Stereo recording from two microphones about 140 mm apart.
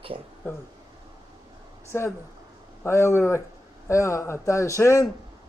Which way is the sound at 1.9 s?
20° left (ahead or behind).